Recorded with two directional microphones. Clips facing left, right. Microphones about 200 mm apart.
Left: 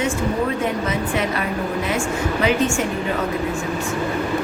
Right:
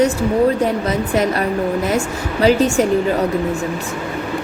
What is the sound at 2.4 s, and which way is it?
Speech, 35° right (ahead or behind).